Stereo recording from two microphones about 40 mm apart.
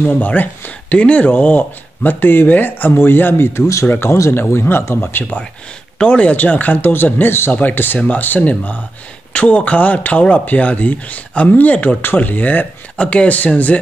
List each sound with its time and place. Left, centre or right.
0.0 s speech: left
1.3 s speech: left
2.9 s a man's voice: left
5.0 s speech: left
6.0 s a man's voice: left
7.5 s speech: left
13.0 s speech: left